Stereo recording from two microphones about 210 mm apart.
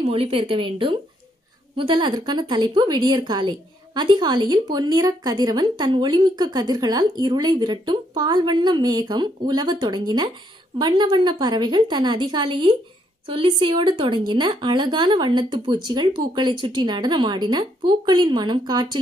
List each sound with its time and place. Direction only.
0.0 s a woman's voice: 25° right (ahead or behind)